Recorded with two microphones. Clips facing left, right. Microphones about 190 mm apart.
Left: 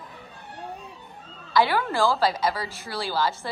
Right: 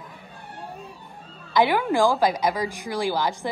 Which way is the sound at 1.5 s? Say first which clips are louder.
Right 2 dB; 15° right (ahead or behind).